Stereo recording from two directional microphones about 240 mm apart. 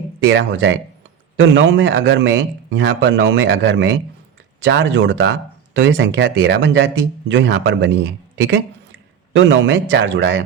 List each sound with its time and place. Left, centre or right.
0.3 s speech: right
9.3 s speech: right